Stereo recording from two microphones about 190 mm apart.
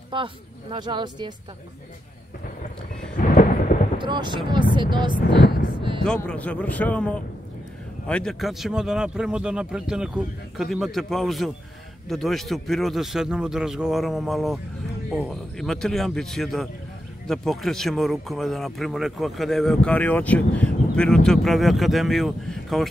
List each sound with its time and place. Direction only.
0.1 s speech: 25° right (ahead or behind)
3.2 s thunder: 45° left (ahead or behind)
4.0 s speech: 25° right (ahead or behind)
5.3 s thunder: 25° right (ahead or behind)
6.0 s a man's voice: 5° left (ahead or behind)